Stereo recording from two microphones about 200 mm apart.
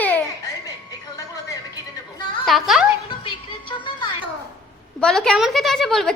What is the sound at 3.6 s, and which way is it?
Music, 25° left (ahead or behind).